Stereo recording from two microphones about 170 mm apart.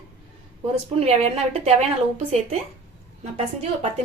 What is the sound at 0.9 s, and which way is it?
A woman's voice, 35° right (ahead or behind).